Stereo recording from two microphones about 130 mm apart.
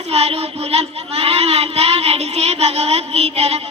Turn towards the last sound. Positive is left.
turn(degrees=-55)  # may be behind; listen again after turning